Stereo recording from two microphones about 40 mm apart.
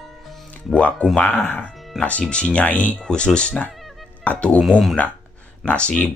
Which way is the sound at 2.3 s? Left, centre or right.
Left.